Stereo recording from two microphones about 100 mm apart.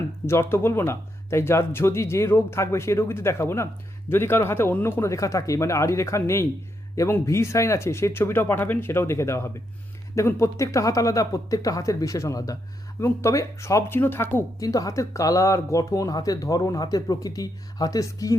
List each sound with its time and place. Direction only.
0.3 s speech: 25° left (ahead or behind)
14.6 s speech: 35° left (ahead or behind)